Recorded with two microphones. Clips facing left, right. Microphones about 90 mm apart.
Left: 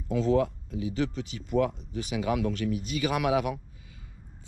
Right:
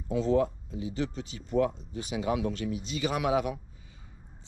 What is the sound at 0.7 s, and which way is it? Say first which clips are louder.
Speech: left 3 dB; 35° right (ahead or behind).